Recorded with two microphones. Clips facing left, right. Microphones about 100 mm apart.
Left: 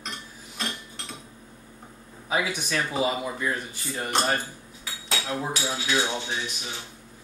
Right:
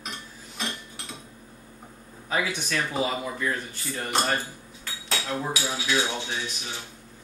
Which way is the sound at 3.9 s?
Centre (ahead or behind).